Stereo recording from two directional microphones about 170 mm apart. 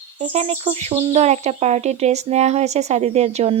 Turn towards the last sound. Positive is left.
turn(degrees=-40)  # may be behind; listen again after turning